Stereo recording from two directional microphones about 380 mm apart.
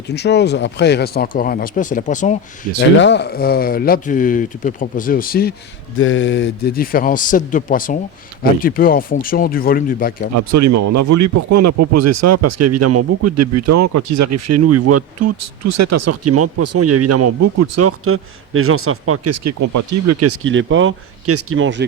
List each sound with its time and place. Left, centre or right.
0.1 s speech: left
10.3 s speech: right